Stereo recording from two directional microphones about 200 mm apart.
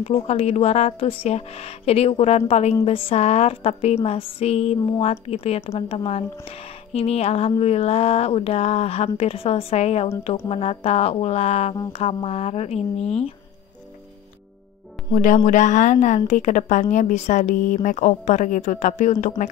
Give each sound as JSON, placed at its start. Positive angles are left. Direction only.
{"t": 0.0, "sound": "speech", "side_deg": 30}
{"t": 15.1, "sound": "speech", "side_deg": 40}